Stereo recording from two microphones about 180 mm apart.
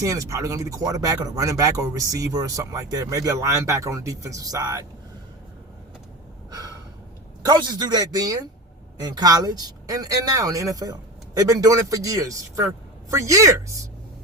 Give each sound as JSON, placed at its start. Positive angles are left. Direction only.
{"t": 0.0, "sound": "speech", "side_deg": -20}
{"t": 7.4, "sound": "a man's voice", "side_deg": -25}